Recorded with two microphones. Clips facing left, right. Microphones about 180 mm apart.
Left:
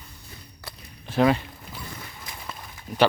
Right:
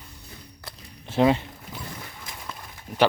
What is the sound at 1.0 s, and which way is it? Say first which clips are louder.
Speech: even; 25° right (ahead or behind).